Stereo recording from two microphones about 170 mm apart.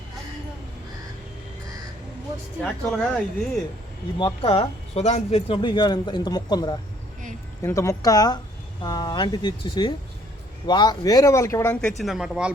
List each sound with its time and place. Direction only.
2.6 s speech: 5° left (ahead or behind)
4.2 s speech: 30° left (ahead or behind); by 12.5 s 5° right (ahead or behind)